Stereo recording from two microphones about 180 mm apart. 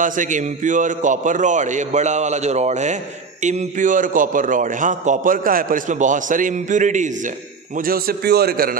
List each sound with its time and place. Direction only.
0.0 s a man's voice: 45° right (ahead or behind)
7.8 s a man's voice: 55° right (ahead or behind)